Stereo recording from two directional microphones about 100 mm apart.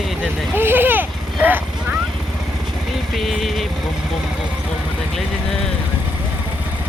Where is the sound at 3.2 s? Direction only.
Centre (ahead or behind).